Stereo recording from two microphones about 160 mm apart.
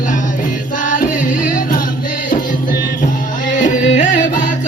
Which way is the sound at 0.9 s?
60° left (ahead or behind).